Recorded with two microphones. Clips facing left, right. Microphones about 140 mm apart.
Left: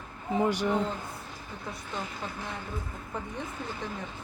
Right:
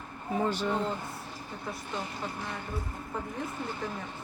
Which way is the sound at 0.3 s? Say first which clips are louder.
Left 3 dB; 15° left (ahead or behind).